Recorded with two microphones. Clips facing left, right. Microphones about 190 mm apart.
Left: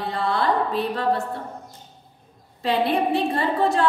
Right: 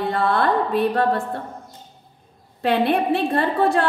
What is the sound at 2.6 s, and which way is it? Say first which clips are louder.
A woman's voice: right 2 dB; 60° right (ahead or behind).